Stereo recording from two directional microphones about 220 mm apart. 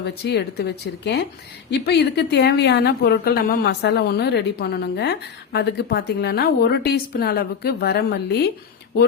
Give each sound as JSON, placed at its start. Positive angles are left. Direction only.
{"t": 0.0, "sound": "a woman's voice", "side_deg": 45}